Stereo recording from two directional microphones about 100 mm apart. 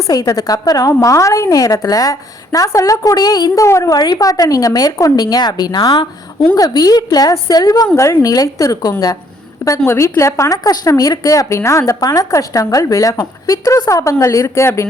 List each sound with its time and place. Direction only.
0.1 s a woman's voice: 40° left (ahead or behind)
3.9 s a woman's voice: 45° left (ahead or behind)
6.5 s a woman's voice: 40° left (ahead or behind)
7.9 s a woman's voice: 30° left (ahead or behind)